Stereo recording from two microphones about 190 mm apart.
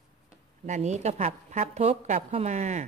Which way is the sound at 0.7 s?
40° right (ahead or behind).